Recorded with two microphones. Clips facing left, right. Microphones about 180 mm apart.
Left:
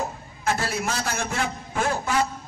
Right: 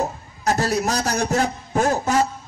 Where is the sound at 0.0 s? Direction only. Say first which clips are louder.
Right 4 dB; 40° right (ahead or behind).